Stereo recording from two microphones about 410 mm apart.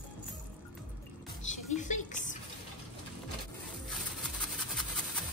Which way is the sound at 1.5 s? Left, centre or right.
Centre.